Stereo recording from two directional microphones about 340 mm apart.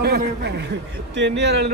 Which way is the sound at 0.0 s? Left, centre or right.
Right.